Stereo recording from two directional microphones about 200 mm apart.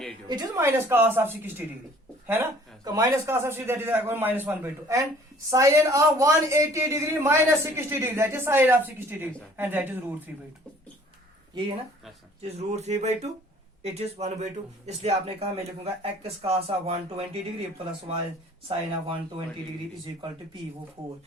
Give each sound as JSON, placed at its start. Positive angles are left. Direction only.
{"t": 0.3, "sound": "a man's voice", "side_deg": -20}
{"t": 12.4, "sound": "speech", "side_deg": -30}
{"t": 18.7, "sound": "speech", "side_deg": -25}